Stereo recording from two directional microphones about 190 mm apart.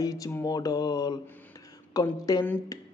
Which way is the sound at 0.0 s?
20° left (ahead or behind).